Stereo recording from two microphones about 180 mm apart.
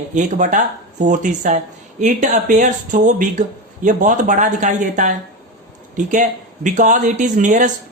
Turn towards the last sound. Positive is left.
turn(degrees=-45)  # may be behind; listen again after turning